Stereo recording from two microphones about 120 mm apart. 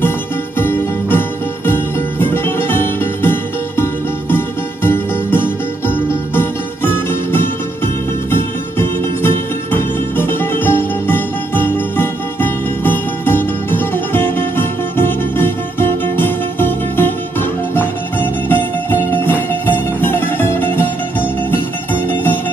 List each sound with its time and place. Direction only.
0.6 s music: 20° left (ahead or behind)
22.0 s music: 15° left (ahead or behind)